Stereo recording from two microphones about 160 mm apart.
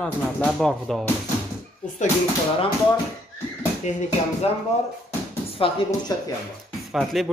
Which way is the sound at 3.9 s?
45° left (ahead or behind).